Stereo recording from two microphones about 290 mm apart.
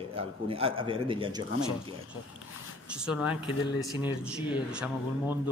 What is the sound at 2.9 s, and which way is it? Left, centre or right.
Speech, centre.